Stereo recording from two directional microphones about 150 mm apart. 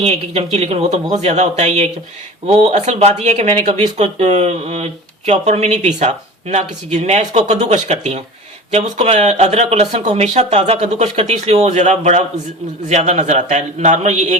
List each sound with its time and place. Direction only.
0.0 s speech: 45° right (ahead or behind)